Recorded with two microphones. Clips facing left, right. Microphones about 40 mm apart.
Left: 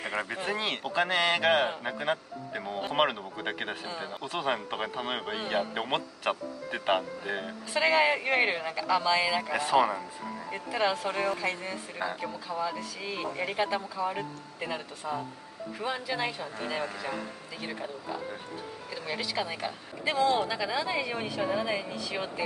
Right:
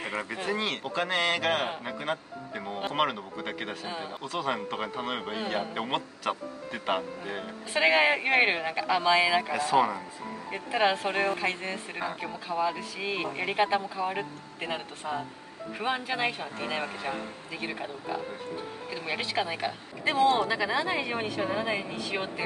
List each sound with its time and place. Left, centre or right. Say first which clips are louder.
0.1 s a man's voice: even; left
4.2 s speech: even; left
4.5 s a man's voice: left 1 dB; centre
7.7 s speech: right 1 dB; right
10.5 s speech: right 3 dB; right
20.2 s speech: right 2 dB; right